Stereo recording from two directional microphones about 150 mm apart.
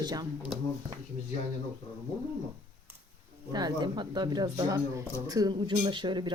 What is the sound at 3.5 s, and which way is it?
Speech, 25° right (ahead or behind).